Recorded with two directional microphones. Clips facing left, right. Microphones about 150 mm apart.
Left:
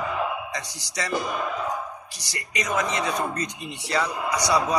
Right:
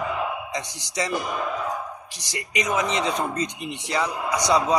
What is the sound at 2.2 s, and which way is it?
Speech, 20° right (ahead or behind).